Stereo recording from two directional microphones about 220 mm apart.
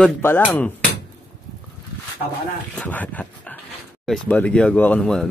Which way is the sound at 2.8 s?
5° left (ahead or behind).